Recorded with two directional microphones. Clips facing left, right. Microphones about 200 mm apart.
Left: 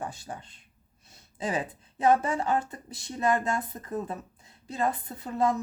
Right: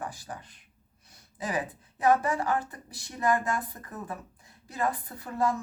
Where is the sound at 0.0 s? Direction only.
25° left (ahead or behind).